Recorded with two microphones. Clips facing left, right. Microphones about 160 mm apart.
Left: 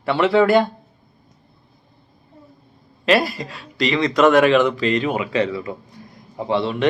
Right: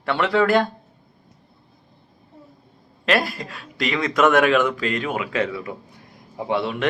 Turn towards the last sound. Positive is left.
turn(degrees=-5)  # may be behind; listen again after turning